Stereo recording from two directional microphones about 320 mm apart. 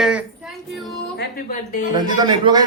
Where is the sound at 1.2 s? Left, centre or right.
Left.